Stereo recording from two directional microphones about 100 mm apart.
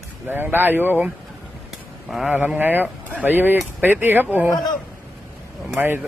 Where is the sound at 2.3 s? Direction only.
20° right (ahead or behind).